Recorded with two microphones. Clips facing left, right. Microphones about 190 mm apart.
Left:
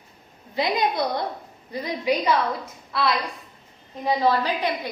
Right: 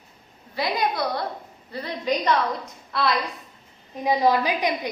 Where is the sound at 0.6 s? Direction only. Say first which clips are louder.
Left 2 dB; 20° left (ahead or behind); by 3.1 s centre (ahead or behind).